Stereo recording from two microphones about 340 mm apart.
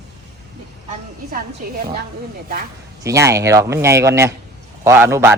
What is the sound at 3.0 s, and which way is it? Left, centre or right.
Speech, centre.